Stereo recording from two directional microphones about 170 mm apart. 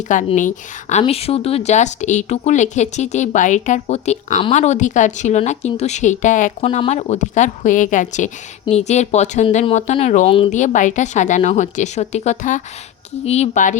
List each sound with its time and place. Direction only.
0.3 s speech: 45° left (ahead or behind)